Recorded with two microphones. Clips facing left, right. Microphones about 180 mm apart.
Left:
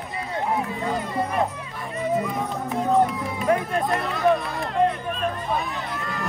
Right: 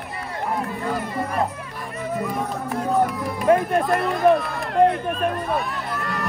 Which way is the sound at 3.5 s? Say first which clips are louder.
Right 5 dB; 50° right (ahead or behind).